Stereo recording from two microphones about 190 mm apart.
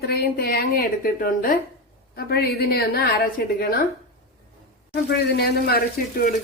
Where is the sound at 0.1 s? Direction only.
55° left (ahead or behind).